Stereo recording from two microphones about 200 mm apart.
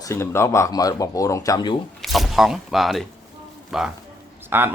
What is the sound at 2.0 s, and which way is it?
Speech, centre (ahead or behind).